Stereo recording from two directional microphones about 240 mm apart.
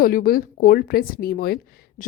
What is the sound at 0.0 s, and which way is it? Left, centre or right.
Speech, left.